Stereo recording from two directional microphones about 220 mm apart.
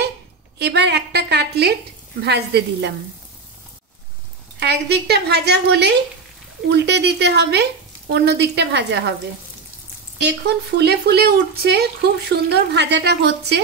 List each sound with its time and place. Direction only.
0.6 s speech: 50° right (ahead or behind)
4.6 s speech: 50° right (ahead or behind)
10.2 s speech: 50° right (ahead or behind)